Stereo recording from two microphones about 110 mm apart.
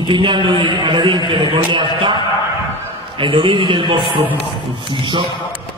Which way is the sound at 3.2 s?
50° right (ahead or behind).